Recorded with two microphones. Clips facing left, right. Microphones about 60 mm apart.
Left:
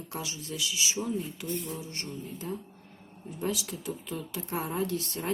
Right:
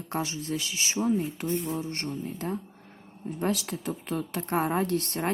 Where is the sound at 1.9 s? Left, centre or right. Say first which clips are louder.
Right 6 dB; right.